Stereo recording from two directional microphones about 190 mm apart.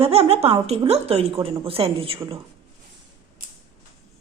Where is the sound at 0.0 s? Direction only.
30° right (ahead or behind).